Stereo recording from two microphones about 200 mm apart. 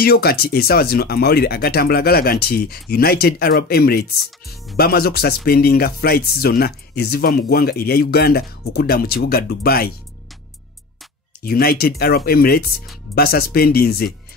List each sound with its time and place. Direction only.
0.0 s speech: 50° left (ahead or behind)
11.4 s speech: 50° left (ahead or behind)